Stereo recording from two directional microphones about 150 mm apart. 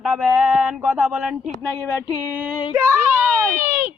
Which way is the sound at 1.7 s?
20° left (ahead or behind).